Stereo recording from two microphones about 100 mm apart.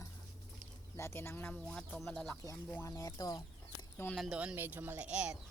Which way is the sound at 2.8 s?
30° left (ahead or behind).